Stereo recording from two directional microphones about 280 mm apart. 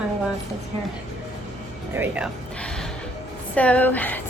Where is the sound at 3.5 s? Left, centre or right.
Centre.